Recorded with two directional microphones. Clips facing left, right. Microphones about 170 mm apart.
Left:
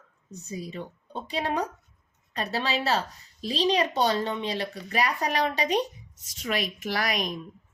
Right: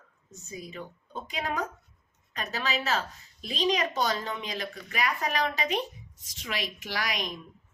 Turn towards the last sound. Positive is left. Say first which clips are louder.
# left 5 dB
turn(degrees=45)  # may be behind; listen again after turning